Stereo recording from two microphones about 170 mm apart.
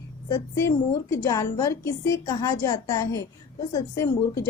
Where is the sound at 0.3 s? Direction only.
20° left (ahead or behind).